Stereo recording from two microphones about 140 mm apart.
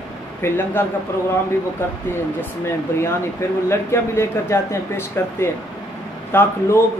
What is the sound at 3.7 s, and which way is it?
Speech, 20° left (ahead or behind).